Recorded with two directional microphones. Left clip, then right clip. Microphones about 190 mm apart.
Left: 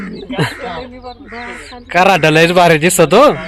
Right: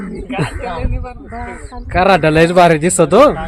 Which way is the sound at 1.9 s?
10° left (ahead or behind).